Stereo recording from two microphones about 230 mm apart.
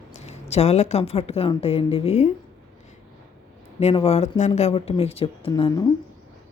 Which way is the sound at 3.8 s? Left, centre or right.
Left.